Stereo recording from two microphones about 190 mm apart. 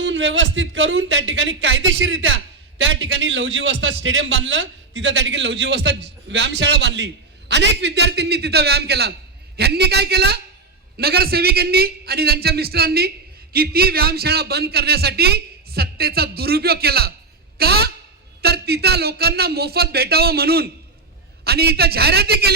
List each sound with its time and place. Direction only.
0.0 s a man's voice: 75° right (ahead or behind); by 22.5 s 55° right (ahead or behind)